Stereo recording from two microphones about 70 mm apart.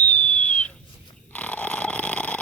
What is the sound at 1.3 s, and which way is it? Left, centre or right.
Snoring, centre.